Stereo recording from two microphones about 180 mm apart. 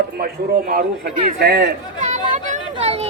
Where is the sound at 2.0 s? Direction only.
40° right (ahead or behind).